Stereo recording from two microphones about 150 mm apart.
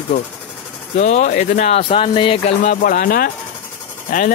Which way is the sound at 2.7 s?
65° left (ahead or behind).